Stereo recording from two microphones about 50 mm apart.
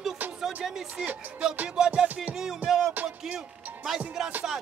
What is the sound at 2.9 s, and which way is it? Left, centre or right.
Music, right.